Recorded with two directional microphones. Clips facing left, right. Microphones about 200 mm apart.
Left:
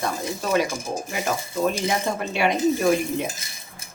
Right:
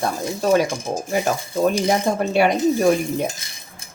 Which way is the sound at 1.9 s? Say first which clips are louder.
Right 6 dB; 40° right (ahead or behind).